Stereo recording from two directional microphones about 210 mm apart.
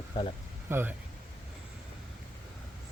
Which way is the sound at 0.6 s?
10° right (ahead or behind).